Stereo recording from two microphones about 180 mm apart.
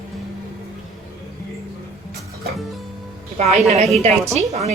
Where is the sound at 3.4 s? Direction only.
35° right (ahead or behind).